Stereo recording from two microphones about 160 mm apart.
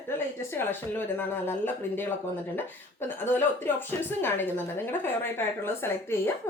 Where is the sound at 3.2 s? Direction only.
15° left (ahead or behind).